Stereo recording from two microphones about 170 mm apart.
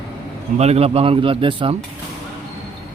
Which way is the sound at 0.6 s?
40° right (ahead or behind).